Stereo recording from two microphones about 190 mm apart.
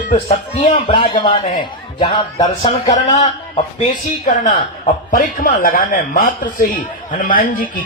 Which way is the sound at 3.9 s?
40° left (ahead or behind).